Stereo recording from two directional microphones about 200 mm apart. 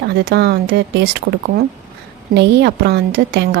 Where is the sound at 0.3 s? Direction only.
55° right (ahead or behind).